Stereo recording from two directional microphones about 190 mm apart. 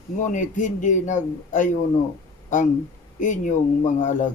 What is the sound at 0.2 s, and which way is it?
A man's voice, 40° left (ahead or behind).